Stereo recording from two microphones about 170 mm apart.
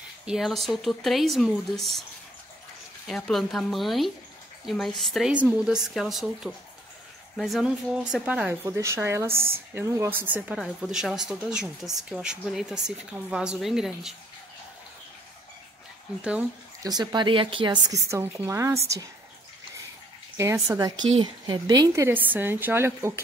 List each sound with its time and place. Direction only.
0.2 s speech: 5° right (ahead or behind)
3.1 s speech: centre (ahead or behind)
8.6 s a woman's voice: 15° right (ahead or behind)
16.8 s speech: 25° right (ahead or behind)
20.3 s a woman's voice: 15° right (ahead or behind)